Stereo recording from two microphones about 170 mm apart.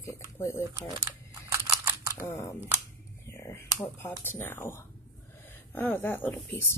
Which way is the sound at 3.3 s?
15° left (ahead or behind).